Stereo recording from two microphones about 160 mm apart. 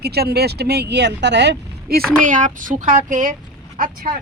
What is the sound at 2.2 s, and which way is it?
Speech, 50° right (ahead or behind).